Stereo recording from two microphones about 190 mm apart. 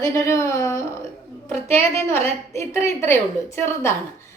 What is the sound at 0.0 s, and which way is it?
A woman's voice, 15° left (ahead or behind).